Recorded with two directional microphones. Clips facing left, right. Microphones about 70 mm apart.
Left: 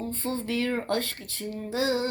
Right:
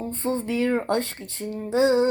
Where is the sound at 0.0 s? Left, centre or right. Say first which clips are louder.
Right 4 dB; right.